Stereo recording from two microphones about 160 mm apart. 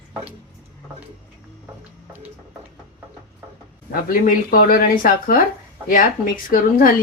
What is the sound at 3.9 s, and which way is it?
Speech, 65° left (ahead or behind).